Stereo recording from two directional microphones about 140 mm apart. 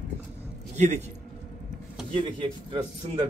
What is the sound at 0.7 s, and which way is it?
Speech, 55° right (ahead or behind).